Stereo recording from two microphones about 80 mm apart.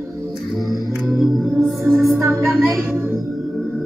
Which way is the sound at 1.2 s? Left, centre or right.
Centre.